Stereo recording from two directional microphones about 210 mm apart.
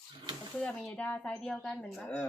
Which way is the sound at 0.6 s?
5° left (ahead or behind).